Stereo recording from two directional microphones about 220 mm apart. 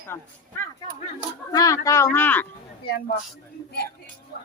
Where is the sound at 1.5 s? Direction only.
15° left (ahead or behind).